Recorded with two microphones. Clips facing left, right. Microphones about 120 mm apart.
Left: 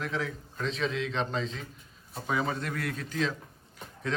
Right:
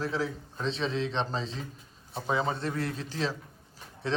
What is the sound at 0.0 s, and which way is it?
A man's voice, 30° right (ahead or behind).